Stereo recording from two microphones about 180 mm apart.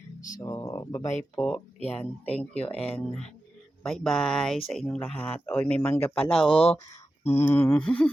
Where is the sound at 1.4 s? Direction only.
5° left (ahead or behind).